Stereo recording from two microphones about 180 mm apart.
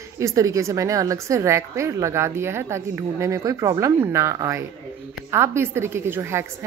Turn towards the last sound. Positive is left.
turn(degrees=-15)  # may be behind; listen again after turning